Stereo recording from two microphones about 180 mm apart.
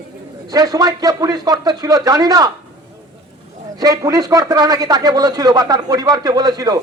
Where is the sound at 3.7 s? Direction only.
20° right (ahead or behind).